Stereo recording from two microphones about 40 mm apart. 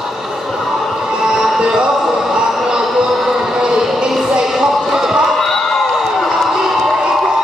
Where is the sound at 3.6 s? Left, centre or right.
Centre.